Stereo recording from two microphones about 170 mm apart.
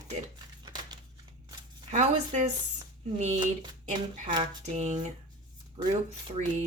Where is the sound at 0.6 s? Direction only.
25° right (ahead or behind).